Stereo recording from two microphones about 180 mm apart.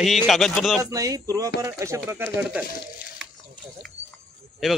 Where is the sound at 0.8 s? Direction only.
20° right (ahead or behind).